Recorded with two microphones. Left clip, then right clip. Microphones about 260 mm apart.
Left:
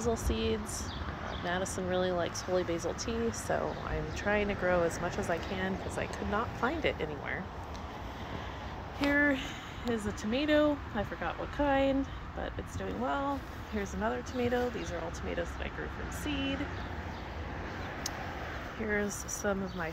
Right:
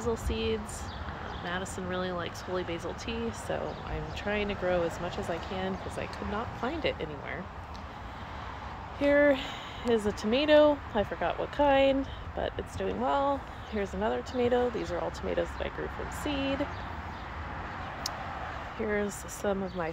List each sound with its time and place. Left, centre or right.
0.0 s speech: centre
4.2 s speech: centre
9.1 s speech: centre
18.8 s speech: centre